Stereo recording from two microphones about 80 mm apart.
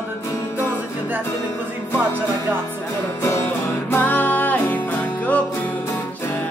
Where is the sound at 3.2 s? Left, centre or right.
Left.